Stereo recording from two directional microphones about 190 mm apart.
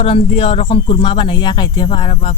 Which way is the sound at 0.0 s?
30° left (ahead or behind).